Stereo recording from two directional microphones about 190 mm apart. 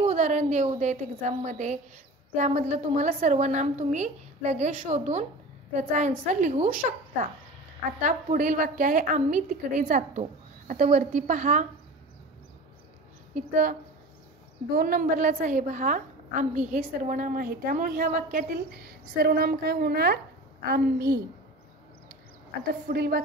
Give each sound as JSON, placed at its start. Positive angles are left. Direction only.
{"t": 0.0, "sound": "a woman's voice", "side_deg": -35}
{"t": 8.0, "sound": "a woman's voice", "side_deg": -45}
{"t": 13.3, "sound": "a woman's voice", "side_deg": -45}
{"t": 14.8, "sound": "a woman's voice", "side_deg": -45}
{"t": 22.8, "sound": "a woman's voice", "side_deg": -55}